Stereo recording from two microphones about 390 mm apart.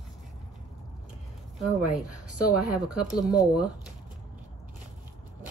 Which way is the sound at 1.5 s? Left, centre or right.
Centre.